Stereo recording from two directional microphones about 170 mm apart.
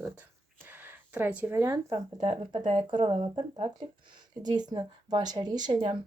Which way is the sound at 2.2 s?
35° right (ahead or behind).